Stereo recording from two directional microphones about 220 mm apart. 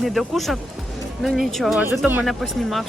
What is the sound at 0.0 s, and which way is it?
Speech, centre (ahead or behind).